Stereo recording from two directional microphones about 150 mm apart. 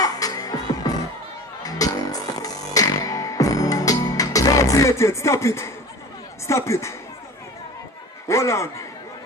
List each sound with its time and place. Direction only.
0.0 s music: 25° left (ahead or behind)
6.4 s speech: 20° left (ahead or behind)
8.3 s speech: 20° left (ahead or behind)